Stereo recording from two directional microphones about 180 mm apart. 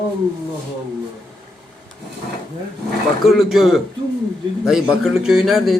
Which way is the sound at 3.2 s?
Centre (ahead or behind).